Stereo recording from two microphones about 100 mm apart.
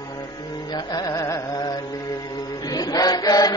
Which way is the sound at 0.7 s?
45° left (ahead or behind).